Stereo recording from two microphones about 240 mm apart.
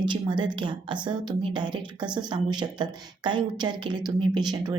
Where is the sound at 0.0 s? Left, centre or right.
Centre.